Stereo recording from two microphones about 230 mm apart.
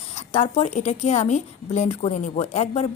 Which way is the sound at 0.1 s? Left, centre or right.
Left.